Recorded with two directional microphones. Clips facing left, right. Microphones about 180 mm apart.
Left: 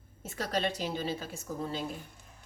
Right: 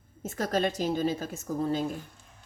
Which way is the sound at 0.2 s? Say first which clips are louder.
Right 5 dB; 45° right (ahead or behind).